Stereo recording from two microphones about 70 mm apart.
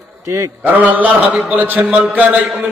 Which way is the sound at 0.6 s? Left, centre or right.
Right.